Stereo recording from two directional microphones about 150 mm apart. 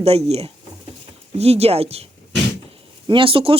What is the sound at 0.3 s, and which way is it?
Speech, 45° right (ahead or behind).